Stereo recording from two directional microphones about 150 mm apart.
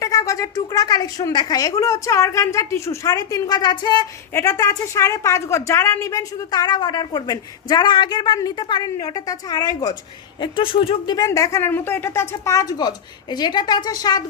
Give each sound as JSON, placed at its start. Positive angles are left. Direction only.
{"t": 0.0, "sound": "a woman's voice", "side_deg": 20}